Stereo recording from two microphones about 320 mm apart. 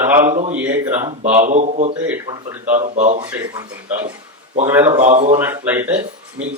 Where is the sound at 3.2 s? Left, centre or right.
Centre.